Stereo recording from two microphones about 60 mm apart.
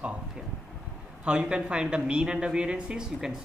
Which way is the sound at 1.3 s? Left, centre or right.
Centre.